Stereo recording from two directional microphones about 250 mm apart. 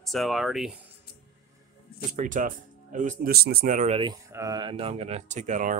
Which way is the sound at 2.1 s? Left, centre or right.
Right.